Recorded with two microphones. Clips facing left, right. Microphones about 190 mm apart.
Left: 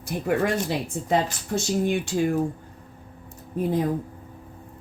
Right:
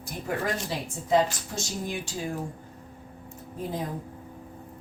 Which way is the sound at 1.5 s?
65° left (ahead or behind).